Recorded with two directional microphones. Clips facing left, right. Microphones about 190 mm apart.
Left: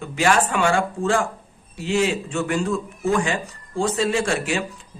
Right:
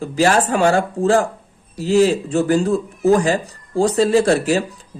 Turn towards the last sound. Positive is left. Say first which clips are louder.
# right 8 dB
turn(degrees=-35)  # may be behind; listen again after turning